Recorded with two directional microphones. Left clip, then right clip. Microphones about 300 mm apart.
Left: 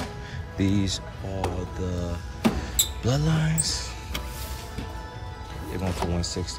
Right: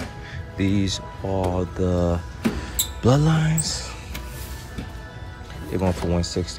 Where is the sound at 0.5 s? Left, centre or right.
Centre.